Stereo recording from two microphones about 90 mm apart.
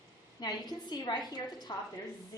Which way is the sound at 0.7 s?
50° left (ahead or behind).